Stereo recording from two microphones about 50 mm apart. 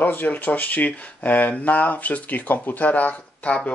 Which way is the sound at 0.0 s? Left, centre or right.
Left.